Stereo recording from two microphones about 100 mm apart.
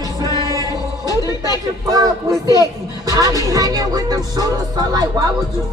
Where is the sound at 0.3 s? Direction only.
35° left (ahead or behind).